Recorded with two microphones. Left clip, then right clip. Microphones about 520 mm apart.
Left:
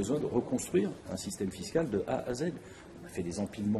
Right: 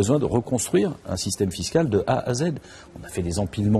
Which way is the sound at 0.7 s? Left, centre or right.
Right.